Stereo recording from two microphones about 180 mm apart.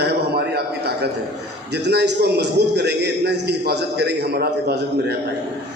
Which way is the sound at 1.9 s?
65° right (ahead or behind).